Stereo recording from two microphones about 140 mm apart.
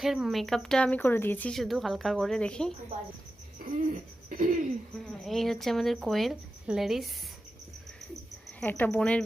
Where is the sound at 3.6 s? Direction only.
60° right (ahead or behind).